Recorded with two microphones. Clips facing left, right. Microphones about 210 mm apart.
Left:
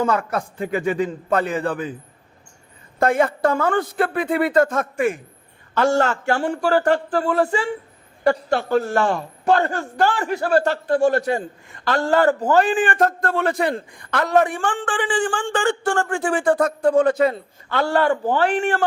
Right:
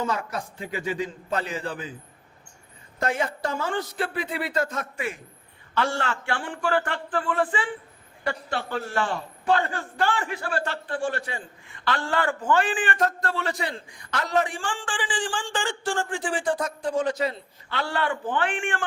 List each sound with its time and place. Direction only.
0.0 s a man's voice: 55° left (ahead or behind)
3.0 s a man's voice: 55° left (ahead or behind); by 18.8 s 40° left (ahead or behind)